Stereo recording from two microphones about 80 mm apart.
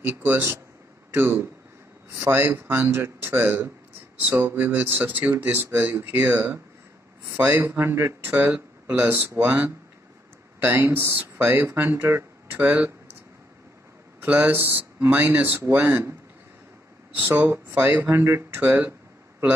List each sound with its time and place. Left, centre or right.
0.0 s speech: right
10.6 s speech: right
14.2 s speech: right
17.1 s speech: right